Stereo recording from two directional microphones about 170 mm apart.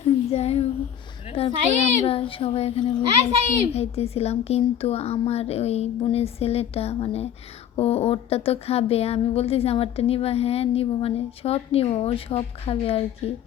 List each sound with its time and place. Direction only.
0.0 s a sound: 35° left (ahead or behind)
1.3 s speech: 35° left (ahead or behind)
3.1 s speech: 40° right (ahead or behind)
3.7 s speech: 35° left (ahead or behind)